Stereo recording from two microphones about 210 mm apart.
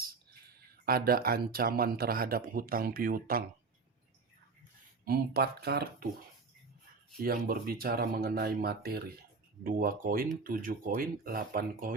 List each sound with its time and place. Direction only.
0.9 s speech: 45° right (ahead or behind)
5.0 s speech: 45° right (ahead or behind)
7.2 s speech: 45° right (ahead or behind)